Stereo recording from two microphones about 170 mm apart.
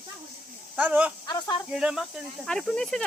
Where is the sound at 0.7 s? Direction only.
10° right (ahead or behind).